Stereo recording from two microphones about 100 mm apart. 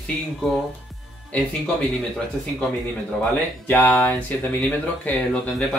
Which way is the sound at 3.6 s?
20° left (ahead or behind).